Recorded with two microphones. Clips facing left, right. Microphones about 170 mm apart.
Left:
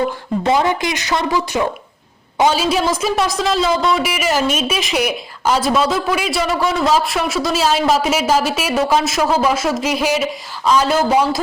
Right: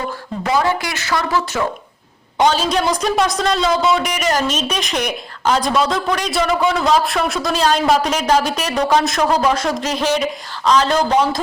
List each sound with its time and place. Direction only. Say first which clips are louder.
0.4 s a woman's voice: left 1 dB; 20° left (ahead or behind)